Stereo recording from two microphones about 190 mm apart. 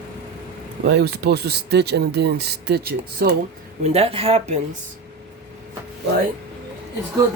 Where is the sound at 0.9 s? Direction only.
60° right (ahead or behind).